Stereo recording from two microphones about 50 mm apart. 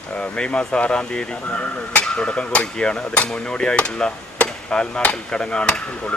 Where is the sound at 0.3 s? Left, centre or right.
Centre.